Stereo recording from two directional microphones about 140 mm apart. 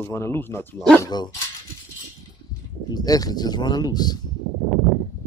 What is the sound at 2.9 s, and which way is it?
Speech, 30° left (ahead or behind).